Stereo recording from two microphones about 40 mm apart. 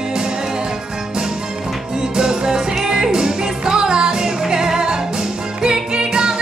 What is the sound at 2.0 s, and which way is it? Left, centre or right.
Music, centre.